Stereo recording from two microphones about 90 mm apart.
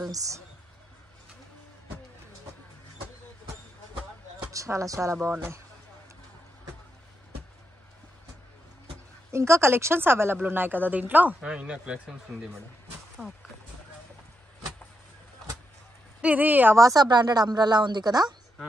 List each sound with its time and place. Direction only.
0.1 s a woman's voice: 40° right (ahead or behind)
4.5 s speech: 35° right (ahead or behind)
9.3 s speech: 30° right (ahead or behind); by 12.0 s 10° right (ahead or behind)
13.2 s speech: 10° right (ahead or behind)
16.2 s a woman's voice: 15° right (ahead or behind)
16.7 s speech: 40° right (ahead or behind)